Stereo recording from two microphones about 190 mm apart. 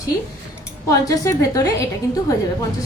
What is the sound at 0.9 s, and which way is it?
Speech, 20° left (ahead or behind).